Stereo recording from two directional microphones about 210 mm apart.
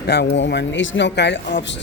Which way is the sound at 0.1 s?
55° left (ahead or behind).